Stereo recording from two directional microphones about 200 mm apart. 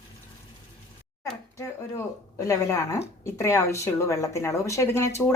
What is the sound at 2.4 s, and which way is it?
Speech, 15° left (ahead or behind).